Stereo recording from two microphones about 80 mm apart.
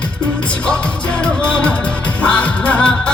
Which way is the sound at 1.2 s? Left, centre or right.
Centre.